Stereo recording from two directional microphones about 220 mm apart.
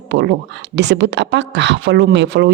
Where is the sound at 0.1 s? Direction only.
50° right (ahead or behind).